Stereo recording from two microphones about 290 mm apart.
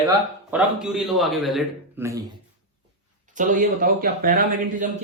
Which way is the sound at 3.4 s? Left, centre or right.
Right.